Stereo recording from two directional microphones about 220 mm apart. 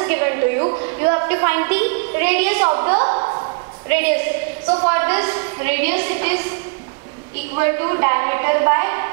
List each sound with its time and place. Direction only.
0.0 s a woman's voice: 15° right (ahead or behind)
2.7 s a sound: 25° right (ahead or behind)
3.9 s a woman's voice: 15° right (ahead or behind)
7.5 s a woman's voice: 15° right (ahead or behind)